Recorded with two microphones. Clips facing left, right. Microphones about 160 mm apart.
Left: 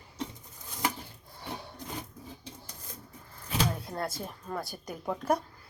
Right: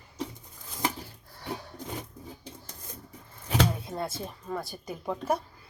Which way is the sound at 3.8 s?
5° right (ahead or behind).